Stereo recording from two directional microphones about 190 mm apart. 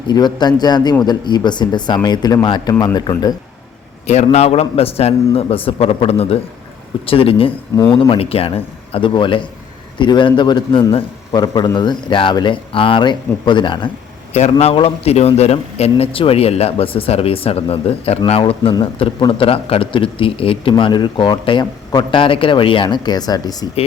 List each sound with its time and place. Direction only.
0.1 s speech: 20° left (ahead or behind)
4.0 s a man's voice: 35° left (ahead or behind); by 23.6 s 20° left (ahead or behind)